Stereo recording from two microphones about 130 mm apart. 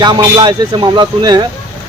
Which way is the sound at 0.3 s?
35° right (ahead or behind).